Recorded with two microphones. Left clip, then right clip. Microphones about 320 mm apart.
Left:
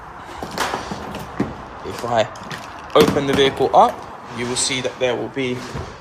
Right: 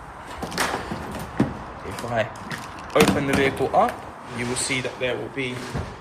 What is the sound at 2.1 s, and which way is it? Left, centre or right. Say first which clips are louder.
Speech: left 6 dB; centre.